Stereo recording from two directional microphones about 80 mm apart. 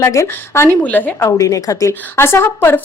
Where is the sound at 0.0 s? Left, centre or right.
Left.